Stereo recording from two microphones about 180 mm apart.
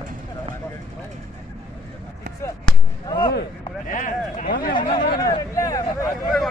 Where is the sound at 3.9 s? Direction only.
45° left (ahead or behind).